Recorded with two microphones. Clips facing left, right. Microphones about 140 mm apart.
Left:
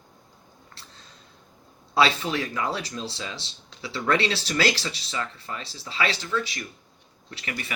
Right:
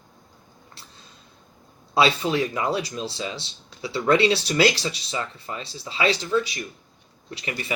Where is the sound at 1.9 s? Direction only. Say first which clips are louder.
Right 2 dB; 15° right (ahead or behind).